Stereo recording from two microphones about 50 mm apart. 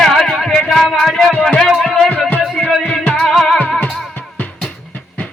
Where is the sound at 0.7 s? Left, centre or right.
Centre.